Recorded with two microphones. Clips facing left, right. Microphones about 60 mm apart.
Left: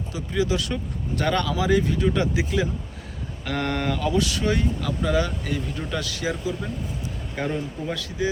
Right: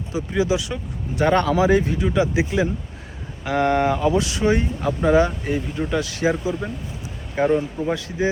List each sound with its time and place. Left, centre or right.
0.1 s speech: right
1.3 s speech: right
2.0 s speech: centre
2.3 s speech: right